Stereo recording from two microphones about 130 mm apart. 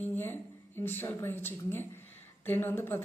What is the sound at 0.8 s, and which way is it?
A woman's voice, 15° left (ahead or behind).